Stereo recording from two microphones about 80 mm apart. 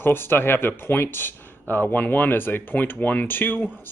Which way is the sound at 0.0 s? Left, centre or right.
Left.